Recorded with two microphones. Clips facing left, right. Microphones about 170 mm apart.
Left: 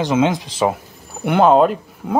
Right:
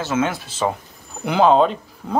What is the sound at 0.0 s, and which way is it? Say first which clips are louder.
Speech: left 5 dB; 15° left (ahead or behind).